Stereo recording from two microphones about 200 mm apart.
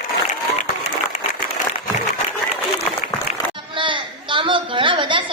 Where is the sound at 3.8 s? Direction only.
25° right (ahead or behind).